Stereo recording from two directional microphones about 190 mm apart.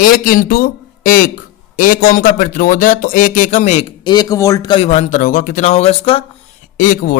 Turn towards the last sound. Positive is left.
turn(degrees=45)  # may be behind; listen again after turning